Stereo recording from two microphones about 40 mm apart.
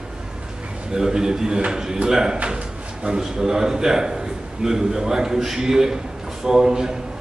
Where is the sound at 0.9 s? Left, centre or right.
Centre.